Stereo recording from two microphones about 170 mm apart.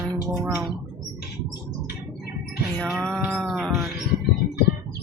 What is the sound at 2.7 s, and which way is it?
Music, 5° left (ahead or behind).